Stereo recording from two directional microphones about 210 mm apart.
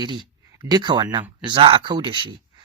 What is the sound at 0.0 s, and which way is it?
Speech, 20° right (ahead or behind).